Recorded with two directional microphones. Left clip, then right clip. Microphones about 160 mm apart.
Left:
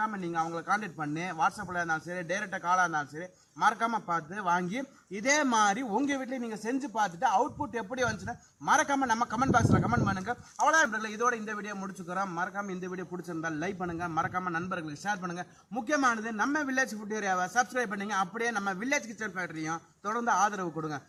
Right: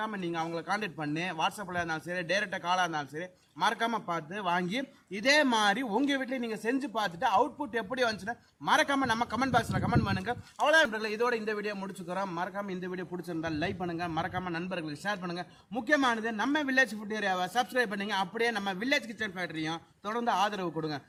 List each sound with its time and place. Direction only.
0.0 s a man's voice: 30° right (ahead or behind)